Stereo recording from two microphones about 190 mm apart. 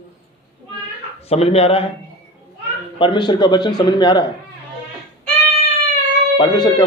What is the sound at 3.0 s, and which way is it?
Speech, 25° left (ahead or behind).